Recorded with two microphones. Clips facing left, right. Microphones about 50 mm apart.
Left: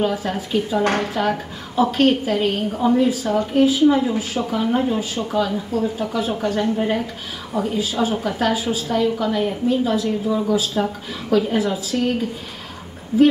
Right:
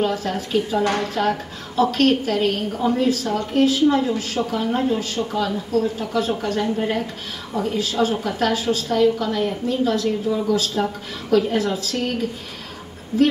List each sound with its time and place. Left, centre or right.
0.0 s a woman's voice: centre